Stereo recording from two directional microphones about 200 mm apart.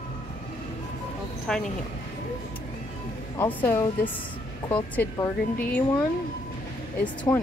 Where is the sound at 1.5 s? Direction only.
5° left (ahead or behind).